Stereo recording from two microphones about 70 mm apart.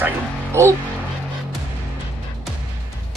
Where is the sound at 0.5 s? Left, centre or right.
Right.